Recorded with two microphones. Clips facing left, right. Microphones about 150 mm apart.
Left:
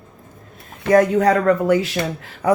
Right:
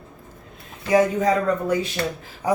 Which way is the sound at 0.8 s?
65° left (ahead or behind).